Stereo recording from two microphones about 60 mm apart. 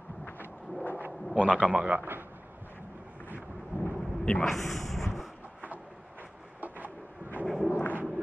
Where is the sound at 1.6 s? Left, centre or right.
Right.